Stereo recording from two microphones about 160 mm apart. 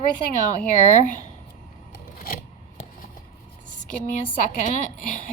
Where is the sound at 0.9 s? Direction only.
55° left (ahead or behind).